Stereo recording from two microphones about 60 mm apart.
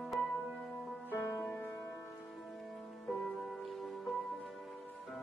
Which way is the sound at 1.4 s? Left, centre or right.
Left.